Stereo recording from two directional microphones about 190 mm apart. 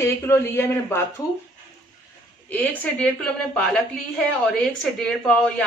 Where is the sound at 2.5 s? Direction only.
10° left (ahead or behind).